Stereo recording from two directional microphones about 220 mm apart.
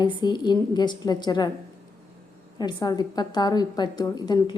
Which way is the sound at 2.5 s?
20° left (ahead or behind).